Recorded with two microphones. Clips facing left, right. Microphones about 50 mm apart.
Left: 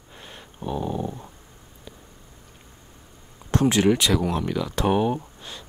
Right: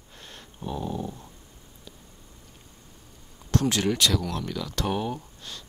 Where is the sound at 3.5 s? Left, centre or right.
Left.